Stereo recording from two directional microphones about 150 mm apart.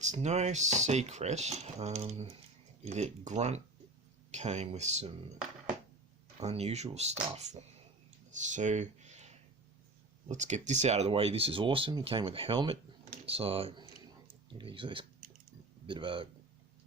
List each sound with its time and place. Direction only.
0.0 s speech: 50° right (ahead or behind)
6.4 s speech: 45° right (ahead or behind)